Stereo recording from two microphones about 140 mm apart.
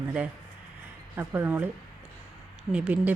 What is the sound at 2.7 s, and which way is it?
Speech, 10° right (ahead or behind).